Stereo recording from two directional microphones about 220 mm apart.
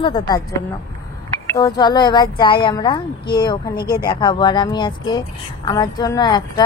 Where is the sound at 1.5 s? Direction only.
15° left (ahead or behind).